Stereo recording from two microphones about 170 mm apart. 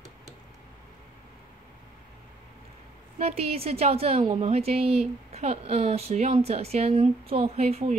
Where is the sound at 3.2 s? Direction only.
35° right (ahead or behind).